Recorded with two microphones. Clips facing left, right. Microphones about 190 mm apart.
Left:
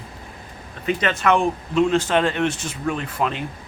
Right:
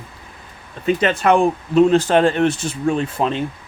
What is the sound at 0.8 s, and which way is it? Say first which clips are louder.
Speech: right 4 dB; 30° right (ahead or behind).